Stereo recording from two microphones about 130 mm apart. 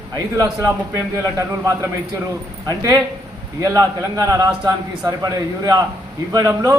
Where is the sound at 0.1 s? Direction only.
30° right (ahead or behind).